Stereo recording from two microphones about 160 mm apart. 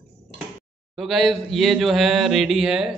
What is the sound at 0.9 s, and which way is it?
Speech, centre (ahead or behind).